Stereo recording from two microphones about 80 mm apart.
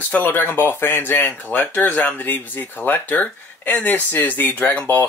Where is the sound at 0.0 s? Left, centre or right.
Left.